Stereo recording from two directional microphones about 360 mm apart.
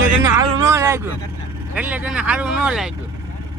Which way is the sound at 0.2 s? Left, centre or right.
Centre.